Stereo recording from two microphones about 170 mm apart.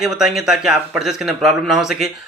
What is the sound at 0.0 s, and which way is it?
Speech, 5° right (ahead or behind).